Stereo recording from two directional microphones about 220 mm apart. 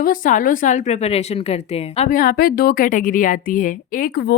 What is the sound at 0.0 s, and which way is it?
A woman's voice, 35° left (ahead or behind).